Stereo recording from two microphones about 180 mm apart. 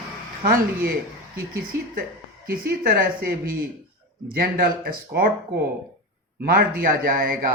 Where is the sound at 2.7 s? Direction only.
55° right (ahead or behind).